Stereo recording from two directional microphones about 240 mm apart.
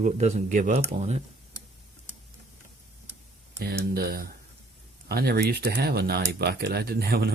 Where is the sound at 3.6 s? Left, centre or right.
Right.